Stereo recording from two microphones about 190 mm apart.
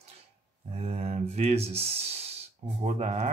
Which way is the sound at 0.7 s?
35° right (ahead or behind).